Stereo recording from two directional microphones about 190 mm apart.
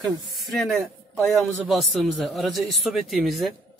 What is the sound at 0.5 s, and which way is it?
A man's voice, centre (ahead or behind).